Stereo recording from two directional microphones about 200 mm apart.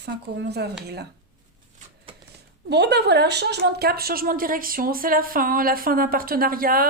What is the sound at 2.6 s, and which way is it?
Speech, 55° right (ahead or behind).